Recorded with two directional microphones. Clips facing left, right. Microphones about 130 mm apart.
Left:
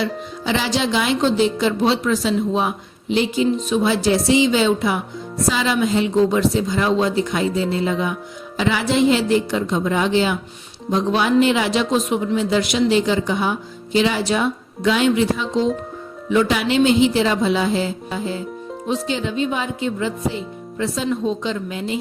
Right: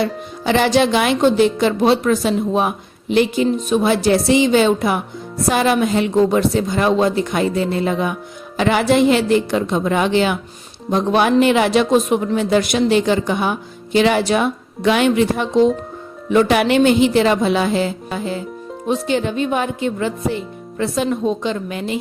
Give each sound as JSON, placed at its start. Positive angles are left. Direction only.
{"t": 0.0, "sound": "speech", "side_deg": -55}